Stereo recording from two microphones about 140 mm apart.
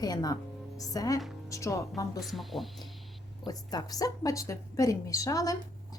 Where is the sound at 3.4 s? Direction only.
30° left (ahead or behind).